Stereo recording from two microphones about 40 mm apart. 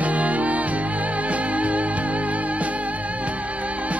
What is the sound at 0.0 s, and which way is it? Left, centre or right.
Music, right.